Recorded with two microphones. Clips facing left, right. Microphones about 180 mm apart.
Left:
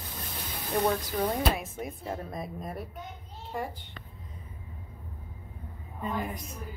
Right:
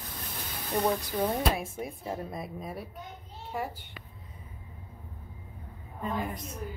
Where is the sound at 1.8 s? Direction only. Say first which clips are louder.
Even; 10° right (ahead or behind).